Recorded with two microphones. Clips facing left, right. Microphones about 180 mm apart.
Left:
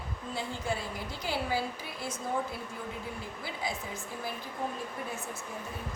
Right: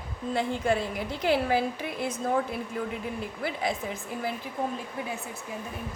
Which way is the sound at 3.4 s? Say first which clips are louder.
Right 7 dB; 60° right (ahead or behind).